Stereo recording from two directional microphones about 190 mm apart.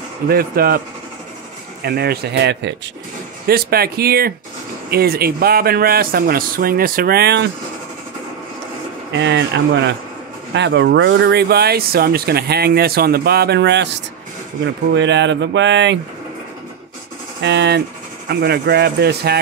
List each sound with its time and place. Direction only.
0.3 s speech: 50° right (ahead or behind)
9.1 s speech: 70° right (ahead or behind)
17.4 s speech: 65° right (ahead or behind)